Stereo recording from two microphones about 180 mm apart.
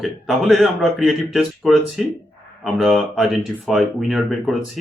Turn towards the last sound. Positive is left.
turn(degrees=0)  # may be behind; listen again after turning